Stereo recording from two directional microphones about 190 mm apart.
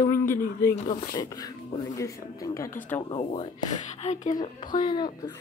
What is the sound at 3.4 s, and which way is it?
Speech, 30° left (ahead or behind).